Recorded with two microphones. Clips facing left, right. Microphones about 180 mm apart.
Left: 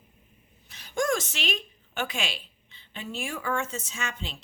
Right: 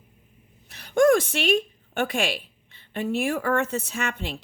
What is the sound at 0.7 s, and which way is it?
A woman's voice, 60° right (ahead or behind).